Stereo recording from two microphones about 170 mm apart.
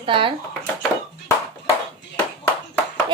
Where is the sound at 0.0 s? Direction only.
30° right (ahead or behind).